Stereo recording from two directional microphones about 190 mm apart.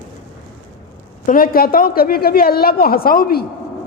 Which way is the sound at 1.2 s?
45° left (ahead or behind).